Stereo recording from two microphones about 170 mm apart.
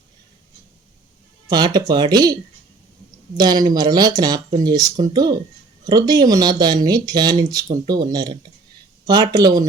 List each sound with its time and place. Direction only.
1.5 s speech: 25° right (ahead or behind)
3.3 s speech: 25° right (ahead or behind)